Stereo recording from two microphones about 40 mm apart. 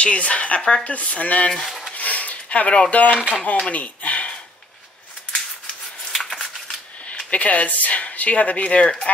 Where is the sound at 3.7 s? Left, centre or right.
Left.